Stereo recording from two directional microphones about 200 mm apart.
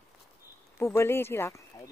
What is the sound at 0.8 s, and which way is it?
Speech, 15° left (ahead or behind).